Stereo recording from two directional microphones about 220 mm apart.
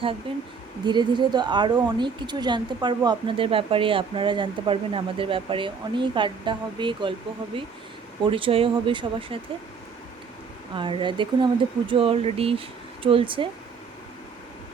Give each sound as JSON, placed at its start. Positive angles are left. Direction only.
{"t": 0.3, "sound": "speech", "side_deg": -25}
{"t": 10.8, "sound": "speech", "side_deg": -20}